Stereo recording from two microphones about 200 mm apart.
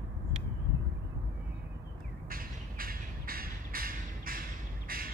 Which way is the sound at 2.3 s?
45° right (ahead or behind).